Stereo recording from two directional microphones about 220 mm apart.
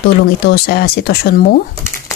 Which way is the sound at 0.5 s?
45° left (ahead or behind).